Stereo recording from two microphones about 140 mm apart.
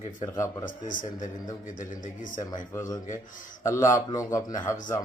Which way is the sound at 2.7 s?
25° left (ahead or behind).